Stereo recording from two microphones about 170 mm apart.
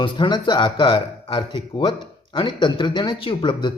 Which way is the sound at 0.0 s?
25° left (ahead or behind).